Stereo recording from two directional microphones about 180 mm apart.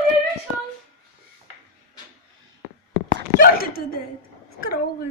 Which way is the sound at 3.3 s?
55° left (ahead or behind).